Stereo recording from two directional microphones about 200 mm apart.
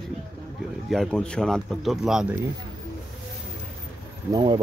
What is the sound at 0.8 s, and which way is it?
Speech, centre (ahead or behind).